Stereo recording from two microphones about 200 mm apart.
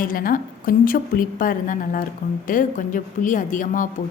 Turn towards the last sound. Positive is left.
turn(degrees=40)  # may be behind; listen again after turning